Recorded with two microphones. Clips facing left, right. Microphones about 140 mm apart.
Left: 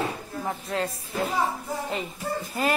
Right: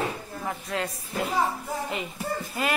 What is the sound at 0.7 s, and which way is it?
Speech, 35° left (ahead or behind).